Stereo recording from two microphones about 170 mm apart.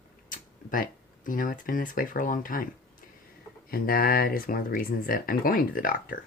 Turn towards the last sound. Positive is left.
turn(degrees=55)  # may be behind; listen again after turning